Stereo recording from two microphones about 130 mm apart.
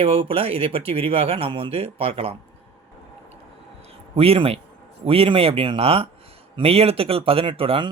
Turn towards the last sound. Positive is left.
turn(degrees=-45)  # may be behind; listen again after turning